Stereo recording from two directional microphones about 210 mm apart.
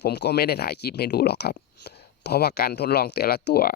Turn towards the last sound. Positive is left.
turn(degrees=50)  # may be behind; listen again after turning